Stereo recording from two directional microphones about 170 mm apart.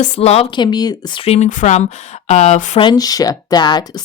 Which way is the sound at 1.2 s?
40° left (ahead or behind).